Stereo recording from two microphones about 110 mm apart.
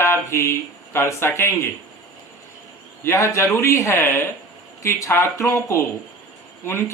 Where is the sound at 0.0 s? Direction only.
25° left (ahead or behind).